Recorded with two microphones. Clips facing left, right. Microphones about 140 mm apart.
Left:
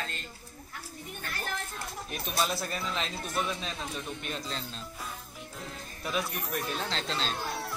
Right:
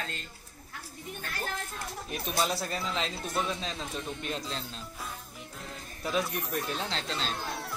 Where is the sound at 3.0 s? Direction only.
25° right (ahead or behind).